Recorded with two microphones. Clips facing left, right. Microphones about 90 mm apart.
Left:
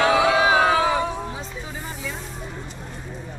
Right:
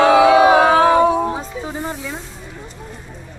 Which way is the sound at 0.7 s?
55° right (ahead or behind).